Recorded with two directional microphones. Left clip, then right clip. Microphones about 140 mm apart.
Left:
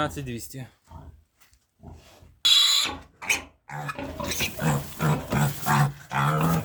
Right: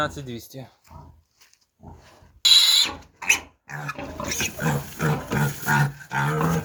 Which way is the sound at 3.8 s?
Centre (ahead or behind).